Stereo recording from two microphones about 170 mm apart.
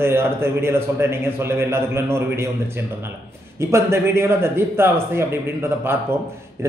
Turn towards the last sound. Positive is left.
turn(degrees=-15)  # may be behind; listen again after turning